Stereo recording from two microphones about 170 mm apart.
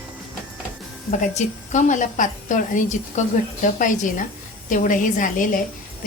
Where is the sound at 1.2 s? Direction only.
45° left (ahead or behind).